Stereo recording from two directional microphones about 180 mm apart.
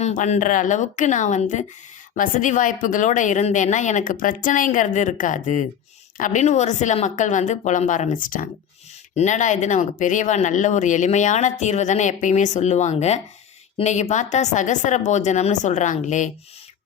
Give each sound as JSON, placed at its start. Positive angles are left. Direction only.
{"t": 0.0, "sound": "speech", "side_deg": 40}